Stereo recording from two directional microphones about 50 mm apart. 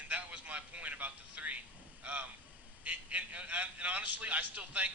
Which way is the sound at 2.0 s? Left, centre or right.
Right.